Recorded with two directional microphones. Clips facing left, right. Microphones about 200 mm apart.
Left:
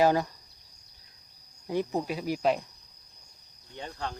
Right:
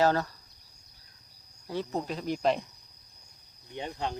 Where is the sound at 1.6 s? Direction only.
15° left (ahead or behind).